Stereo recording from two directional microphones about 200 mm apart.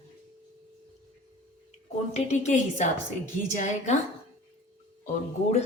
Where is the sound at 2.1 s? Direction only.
35° left (ahead or behind).